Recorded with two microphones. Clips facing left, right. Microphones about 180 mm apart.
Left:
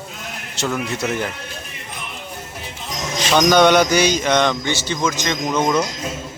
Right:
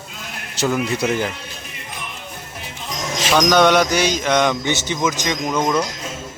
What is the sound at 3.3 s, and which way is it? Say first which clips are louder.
Speech: left 1 dB; centre (ahead or behind).